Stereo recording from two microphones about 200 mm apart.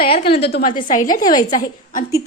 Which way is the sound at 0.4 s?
50° left (ahead or behind).